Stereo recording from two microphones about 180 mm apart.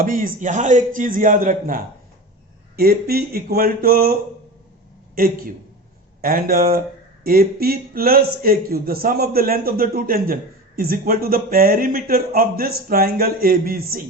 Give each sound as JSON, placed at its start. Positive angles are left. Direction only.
{"t": 0.0, "sound": "a man's voice", "side_deg": -50}